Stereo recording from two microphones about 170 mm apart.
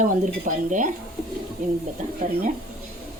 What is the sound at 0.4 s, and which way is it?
Speech, 50° right (ahead or behind).